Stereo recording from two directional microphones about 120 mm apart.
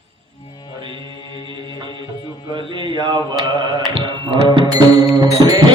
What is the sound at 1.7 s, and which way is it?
Music, 40° right (ahead or behind).